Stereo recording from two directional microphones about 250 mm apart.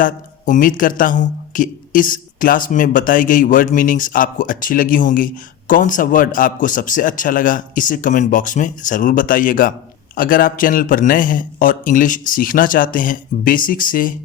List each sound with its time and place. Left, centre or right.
0.0 s speech: left